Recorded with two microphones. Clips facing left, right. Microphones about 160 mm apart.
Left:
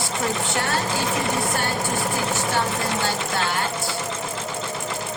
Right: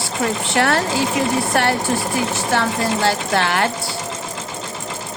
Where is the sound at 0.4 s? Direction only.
75° right (ahead or behind).